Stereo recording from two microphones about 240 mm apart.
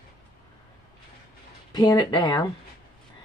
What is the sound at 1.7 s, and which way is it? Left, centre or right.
Speech, centre.